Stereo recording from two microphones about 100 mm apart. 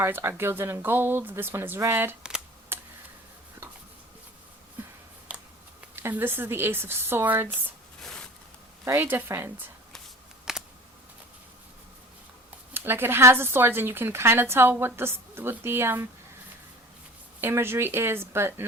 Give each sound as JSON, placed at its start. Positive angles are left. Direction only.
{"t": 0.0, "sound": "a woman's voice", "side_deg": -25}
{"t": 6.0, "sound": "a woman's voice", "side_deg": -20}
{"t": 8.8, "sound": "a woman's voice", "side_deg": -25}
{"t": 10.5, "sound": "a sound", "side_deg": -5}
{"t": 12.7, "sound": "a woman's voice", "side_deg": -25}
{"t": 17.4, "sound": "a woman's voice", "side_deg": -25}